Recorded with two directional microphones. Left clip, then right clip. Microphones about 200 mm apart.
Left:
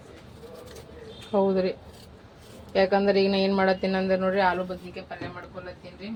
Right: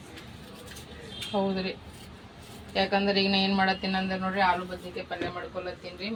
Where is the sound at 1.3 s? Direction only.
50° left (ahead or behind).